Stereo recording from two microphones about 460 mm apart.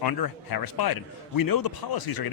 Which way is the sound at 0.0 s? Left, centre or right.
Left.